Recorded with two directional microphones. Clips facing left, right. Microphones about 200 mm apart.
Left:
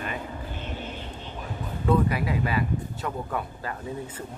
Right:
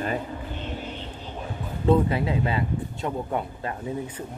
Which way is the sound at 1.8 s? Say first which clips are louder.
Right 3 dB; 25° right (ahead or behind).